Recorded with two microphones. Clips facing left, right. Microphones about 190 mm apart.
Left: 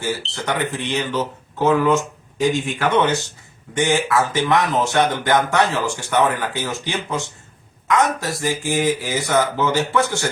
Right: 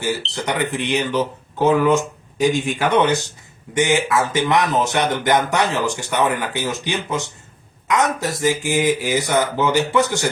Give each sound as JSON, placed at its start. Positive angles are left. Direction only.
{"t": 0.3, "sound": "speech", "side_deg": -20}